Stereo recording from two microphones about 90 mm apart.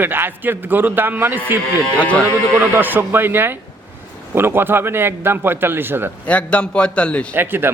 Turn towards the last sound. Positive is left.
turn(degrees=-25)  # may be behind; listen again after turning